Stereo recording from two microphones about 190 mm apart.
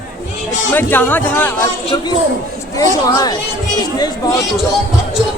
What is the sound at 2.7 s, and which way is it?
A man's voice, 15° left (ahead or behind).